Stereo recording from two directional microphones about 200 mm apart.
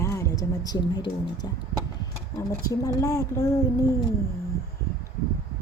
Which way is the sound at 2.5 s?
15° left (ahead or behind).